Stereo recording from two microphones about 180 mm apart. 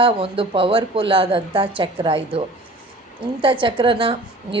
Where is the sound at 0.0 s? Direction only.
30° right (ahead or behind).